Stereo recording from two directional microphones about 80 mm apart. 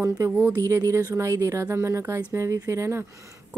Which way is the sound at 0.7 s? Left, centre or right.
Right.